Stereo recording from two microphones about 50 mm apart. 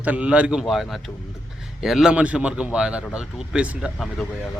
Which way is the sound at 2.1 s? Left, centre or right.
Right.